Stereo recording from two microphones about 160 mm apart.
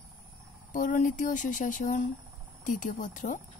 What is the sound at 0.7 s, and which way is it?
A woman's voice, 55° left (ahead or behind).